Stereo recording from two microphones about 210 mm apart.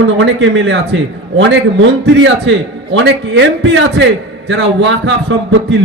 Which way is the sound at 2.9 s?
60° right (ahead or behind).